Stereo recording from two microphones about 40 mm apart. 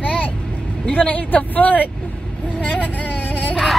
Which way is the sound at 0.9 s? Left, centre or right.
Left.